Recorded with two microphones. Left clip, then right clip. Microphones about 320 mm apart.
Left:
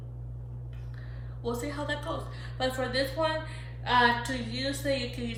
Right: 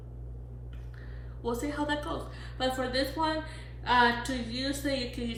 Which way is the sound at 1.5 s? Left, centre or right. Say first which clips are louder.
Right 1 dB; left.